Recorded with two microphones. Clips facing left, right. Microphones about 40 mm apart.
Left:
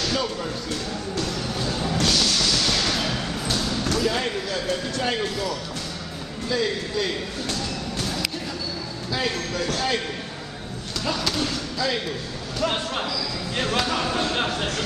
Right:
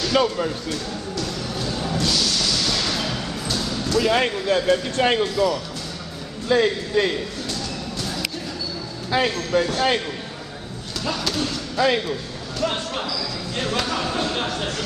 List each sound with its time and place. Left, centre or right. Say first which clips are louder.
0.1 s speech: right 6 dB; right
1.2 s music: even; centre
2.1 s a sound: even; centre
2.6 s a sound: even; centre
3.5 s basketball bounce: even; centre
4.0 s speech: right 4 dB; right
6.5 s speech: right 6 dB; right
9.1 s speech: right 6 dB; right
11.1 s speech: right 1 dB; centre
11.7 s speech: right 9 dB; right
12.5 s speech: even; centre